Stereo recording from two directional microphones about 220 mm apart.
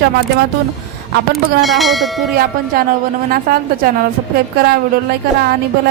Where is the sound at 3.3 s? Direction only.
40° right (ahead or behind).